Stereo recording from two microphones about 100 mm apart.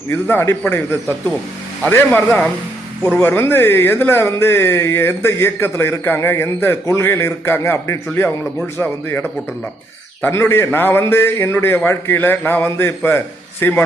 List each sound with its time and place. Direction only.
0.1 s speech: 25° left (ahead or behind)